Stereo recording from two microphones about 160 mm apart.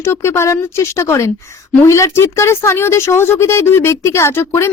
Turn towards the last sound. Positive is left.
turn(degrees=15)  # may be behind; listen again after turning